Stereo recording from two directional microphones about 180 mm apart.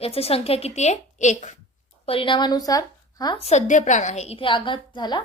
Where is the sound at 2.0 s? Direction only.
30° left (ahead or behind).